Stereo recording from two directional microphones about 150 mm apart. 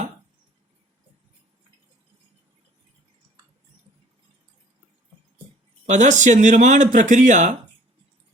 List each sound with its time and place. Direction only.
5.8 s speech: 55° right (ahead or behind)